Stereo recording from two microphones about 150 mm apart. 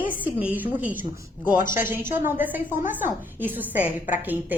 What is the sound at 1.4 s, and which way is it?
Speech, 60° left (ahead or behind).